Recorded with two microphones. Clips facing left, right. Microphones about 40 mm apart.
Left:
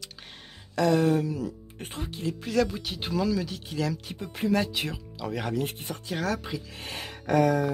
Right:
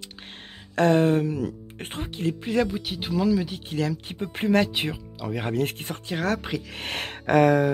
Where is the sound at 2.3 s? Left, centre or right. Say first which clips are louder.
Right 1 dB; right.